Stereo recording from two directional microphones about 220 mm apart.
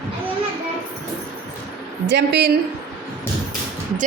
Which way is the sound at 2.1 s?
50° right (ahead or behind).